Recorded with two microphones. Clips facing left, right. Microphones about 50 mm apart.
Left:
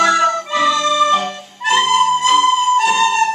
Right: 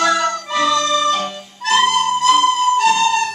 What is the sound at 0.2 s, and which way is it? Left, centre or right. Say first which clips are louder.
Music: left 3 dB; centre.